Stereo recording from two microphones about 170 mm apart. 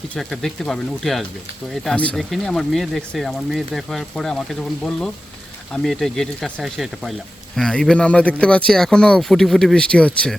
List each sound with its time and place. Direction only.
0.1 s speech: centre (ahead or behind)